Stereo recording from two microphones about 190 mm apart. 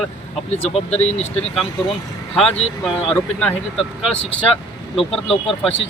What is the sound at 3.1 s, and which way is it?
Speech, 5° left (ahead or behind).